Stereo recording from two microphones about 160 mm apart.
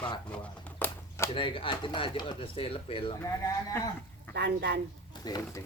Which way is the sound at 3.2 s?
20° left (ahead or behind).